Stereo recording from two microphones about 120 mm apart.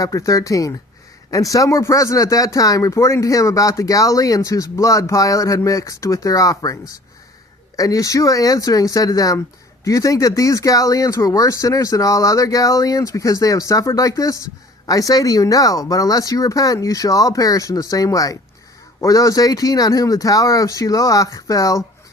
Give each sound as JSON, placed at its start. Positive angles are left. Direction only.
{"t": 0.0, "sound": "speech", "side_deg": 30}